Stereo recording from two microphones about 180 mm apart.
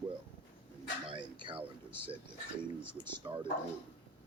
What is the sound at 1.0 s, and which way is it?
Speech, 25° right (ahead or behind).